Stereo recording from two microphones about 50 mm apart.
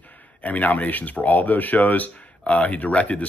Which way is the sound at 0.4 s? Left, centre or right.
Left.